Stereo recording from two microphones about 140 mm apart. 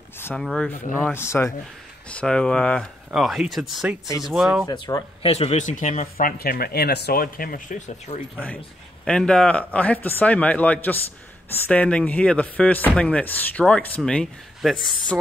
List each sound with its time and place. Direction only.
0.4 s speech: 5° left (ahead or behind)
1.0 s speech: 15° left (ahead or behind)
2.0 s speech: 5° left (ahead or behind)
4.6 s speech: 30° left (ahead or behind)
5.2 s speech: 45° left (ahead or behind)
6.2 s speech: 90° left; by 8.2 s 60° left (ahead or behind)
9.0 s speech: 5° left (ahead or behind)